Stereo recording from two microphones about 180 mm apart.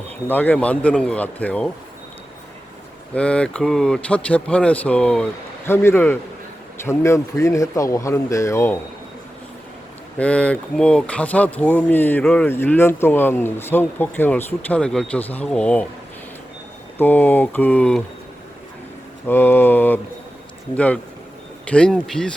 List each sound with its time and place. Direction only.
0.3 s speech: 10° left (ahead or behind)
3.2 s speech: 5° left (ahead or behind)
10.2 s speech: 5° left (ahead or behind)
17.0 s speech: 10° left (ahead or behind)
19.3 s speech: 10° left (ahead or behind)